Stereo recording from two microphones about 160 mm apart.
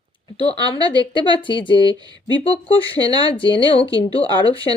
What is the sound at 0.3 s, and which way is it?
Speech, 35° left (ahead or behind).